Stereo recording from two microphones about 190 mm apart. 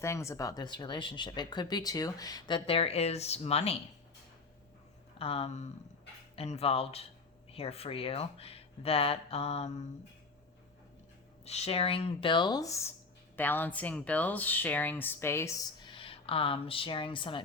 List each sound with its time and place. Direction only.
0.0 s speech: 15° left (ahead or behind); by 3.8 s 30° left (ahead or behind)
5.1 s speech: 30° left (ahead or behind)
11.4 s speech: 35° left (ahead or behind)